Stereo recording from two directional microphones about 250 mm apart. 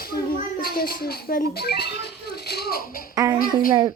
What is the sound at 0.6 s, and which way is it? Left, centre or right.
A child's voice, left.